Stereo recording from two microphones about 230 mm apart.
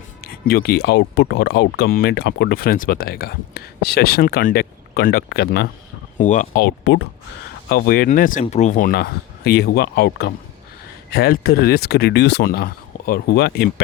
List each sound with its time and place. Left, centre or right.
0.4 s speech: left